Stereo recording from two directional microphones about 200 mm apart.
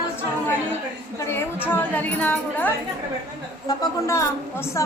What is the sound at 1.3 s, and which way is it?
A woman's voice, 10° left (ahead or behind).